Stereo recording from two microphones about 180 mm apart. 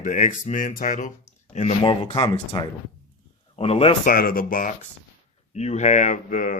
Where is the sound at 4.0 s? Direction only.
50° left (ahead or behind).